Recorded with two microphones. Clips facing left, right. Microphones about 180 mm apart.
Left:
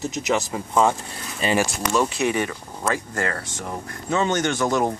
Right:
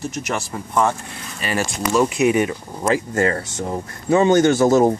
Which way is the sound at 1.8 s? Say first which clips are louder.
Right 9 dB; 10° right (ahead or behind).